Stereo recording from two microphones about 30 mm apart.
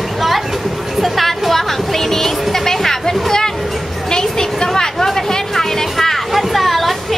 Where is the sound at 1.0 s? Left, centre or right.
Centre.